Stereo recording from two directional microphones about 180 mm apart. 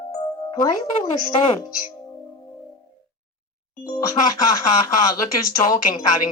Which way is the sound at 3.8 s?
20° left (ahead or behind).